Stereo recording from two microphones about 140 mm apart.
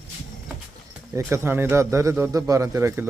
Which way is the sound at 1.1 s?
15° right (ahead or behind).